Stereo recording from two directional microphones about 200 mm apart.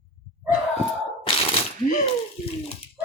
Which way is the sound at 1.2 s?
30° left (ahead or behind).